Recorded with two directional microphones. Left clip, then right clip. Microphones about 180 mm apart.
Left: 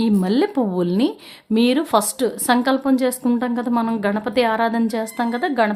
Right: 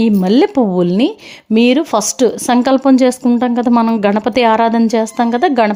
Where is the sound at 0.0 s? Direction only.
25° right (ahead or behind).